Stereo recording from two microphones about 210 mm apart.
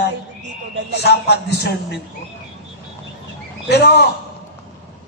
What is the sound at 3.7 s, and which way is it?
Speech, 50° left (ahead or behind).